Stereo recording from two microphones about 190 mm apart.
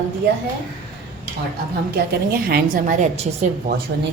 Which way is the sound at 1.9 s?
55° right (ahead or behind).